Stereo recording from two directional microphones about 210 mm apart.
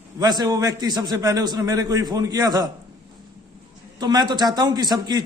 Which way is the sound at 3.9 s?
20° right (ahead or behind).